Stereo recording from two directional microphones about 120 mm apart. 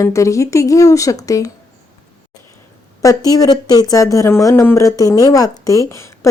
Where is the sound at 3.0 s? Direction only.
30° left (ahead or behind).